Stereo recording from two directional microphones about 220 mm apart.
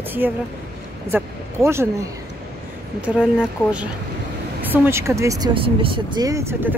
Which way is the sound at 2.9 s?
5° right (ahead or behind).